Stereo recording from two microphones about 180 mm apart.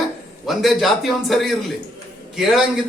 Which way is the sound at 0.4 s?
Centre (ahead or behind).